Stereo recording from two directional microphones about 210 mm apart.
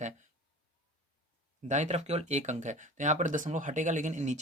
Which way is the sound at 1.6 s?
35° right (ahead or behind).